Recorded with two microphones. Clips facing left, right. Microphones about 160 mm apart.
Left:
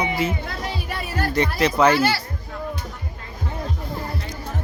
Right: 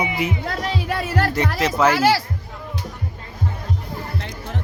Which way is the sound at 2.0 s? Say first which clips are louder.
Right 4 dB; 90° right.